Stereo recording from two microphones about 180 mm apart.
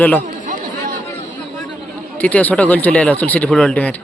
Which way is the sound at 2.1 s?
10° left (ahead or behind).